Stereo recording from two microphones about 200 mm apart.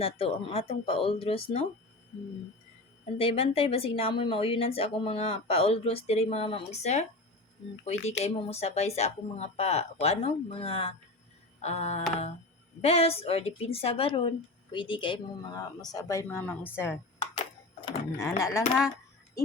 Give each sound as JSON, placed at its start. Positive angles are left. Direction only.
{"t": 0.0, "sound": "speech", "side_deg": 30}
{"t": 3.2, "sound": "speech", "side_deg": 30}
{"t": 8.2, "sound": "speech", "side_deg": 30}